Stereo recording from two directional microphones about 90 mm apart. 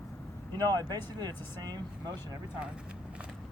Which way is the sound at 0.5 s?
50° right (ahead or behind).